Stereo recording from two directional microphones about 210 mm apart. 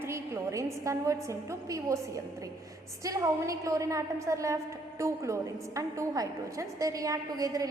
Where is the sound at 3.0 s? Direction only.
15° right (ahead or behind).